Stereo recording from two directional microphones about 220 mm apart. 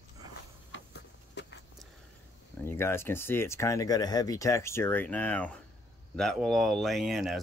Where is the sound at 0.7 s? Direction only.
55° left (ahead or behind).